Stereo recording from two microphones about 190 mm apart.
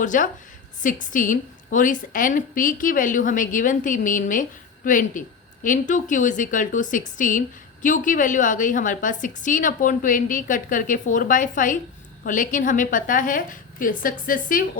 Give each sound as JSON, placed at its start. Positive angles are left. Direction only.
{"t": 0.0, "sound": "a woman's voice", "side_deg": 45}